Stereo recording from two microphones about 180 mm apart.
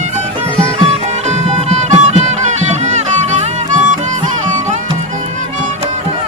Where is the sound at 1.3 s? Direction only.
40° right (ahead or behind).